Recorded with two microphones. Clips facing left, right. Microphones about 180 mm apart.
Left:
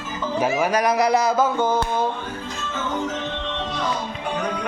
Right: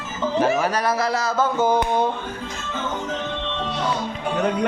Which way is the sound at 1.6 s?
15° right (ahead or behind).